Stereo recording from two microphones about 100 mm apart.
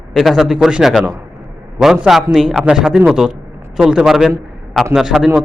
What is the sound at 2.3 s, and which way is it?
A man's voice, 5° right (ahead or behind).